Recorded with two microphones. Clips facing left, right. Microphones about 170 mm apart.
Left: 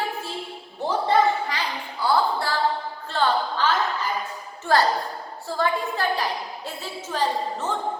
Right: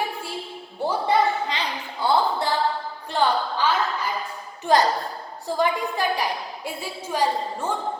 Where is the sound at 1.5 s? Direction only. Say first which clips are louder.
Right 1 dB; 20° right (ahead or behind).